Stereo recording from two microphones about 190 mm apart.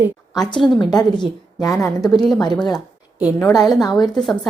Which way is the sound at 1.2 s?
20° left (ahead or behind).